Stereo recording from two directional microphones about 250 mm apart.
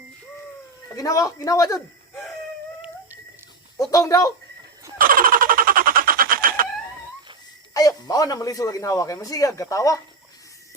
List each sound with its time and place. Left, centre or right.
0.9 s a man's voice: centre
3.8 s a man's voice: centre
4.9 s a sound: right
7.7 s a man's voice: centre